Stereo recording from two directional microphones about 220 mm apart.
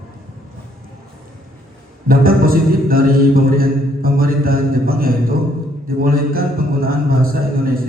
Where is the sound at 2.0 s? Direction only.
40° right (ahead or behind).